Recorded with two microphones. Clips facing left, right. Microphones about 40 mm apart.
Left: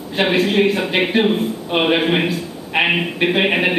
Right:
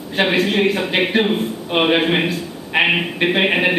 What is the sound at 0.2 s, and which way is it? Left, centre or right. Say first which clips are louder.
A man's voice: left 1 dB; centre.